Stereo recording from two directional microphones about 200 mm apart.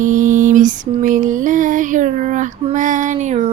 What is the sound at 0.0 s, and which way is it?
Lullaby, 40° right (ahead or behind).